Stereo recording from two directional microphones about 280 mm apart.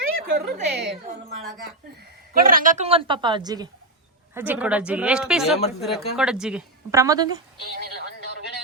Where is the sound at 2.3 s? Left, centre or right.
Right; by 7.3 s centre.